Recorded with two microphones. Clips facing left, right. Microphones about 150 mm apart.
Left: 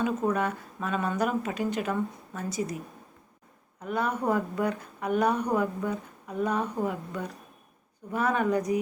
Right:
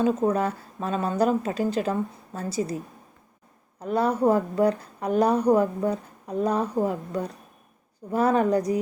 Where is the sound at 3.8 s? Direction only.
35° right (ahead or behind).